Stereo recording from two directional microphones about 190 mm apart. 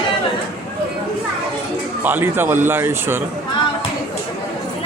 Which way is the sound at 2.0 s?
10° right (ahead or behind).